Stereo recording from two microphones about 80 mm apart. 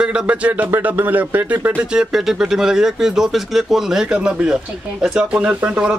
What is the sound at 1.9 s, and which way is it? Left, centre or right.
Speech, centre.